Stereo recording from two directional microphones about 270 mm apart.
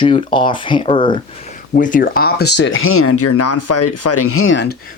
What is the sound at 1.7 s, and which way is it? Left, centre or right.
Speech, left.